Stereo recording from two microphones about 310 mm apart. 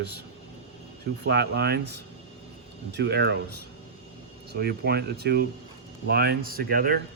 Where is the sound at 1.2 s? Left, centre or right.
Right.